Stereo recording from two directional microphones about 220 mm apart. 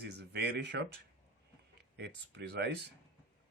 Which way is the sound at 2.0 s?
50° right (ahead or behind).